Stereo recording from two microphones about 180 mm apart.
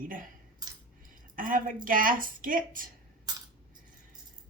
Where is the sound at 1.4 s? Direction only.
50° right (ahead or behind).